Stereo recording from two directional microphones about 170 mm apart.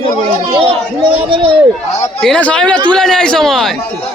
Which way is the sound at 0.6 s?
30° right (ahead or behind).